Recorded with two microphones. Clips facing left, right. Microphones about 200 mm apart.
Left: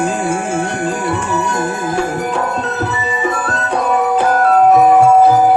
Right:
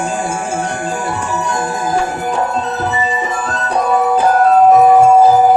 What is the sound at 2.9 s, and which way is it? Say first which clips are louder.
Music: right 1 dB; 65° left (ahead or behind).